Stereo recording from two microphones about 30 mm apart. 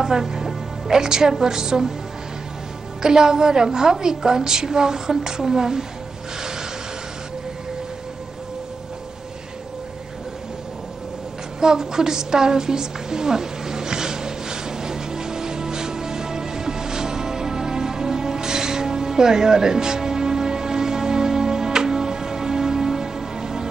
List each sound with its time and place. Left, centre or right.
0.0 s music: centre
1.4 s a woman's voice: centre
3.0 s a woman's voice: right
11.6 s a sound: right